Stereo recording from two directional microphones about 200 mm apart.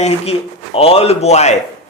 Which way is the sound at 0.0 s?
30° left (ahead or behind).